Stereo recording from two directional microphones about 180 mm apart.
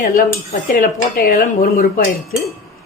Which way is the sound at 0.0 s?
50° left (ahead or behind).